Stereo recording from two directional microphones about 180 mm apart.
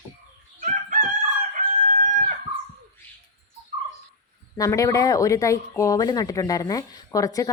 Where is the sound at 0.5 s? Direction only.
45° right (ahead or behind).